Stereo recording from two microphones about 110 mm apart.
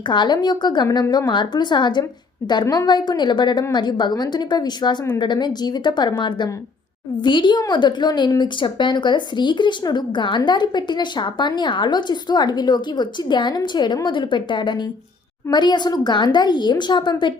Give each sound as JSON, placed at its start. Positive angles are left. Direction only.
{"t": 0.1, "sound": "a woman's voice", "side_deg": 45}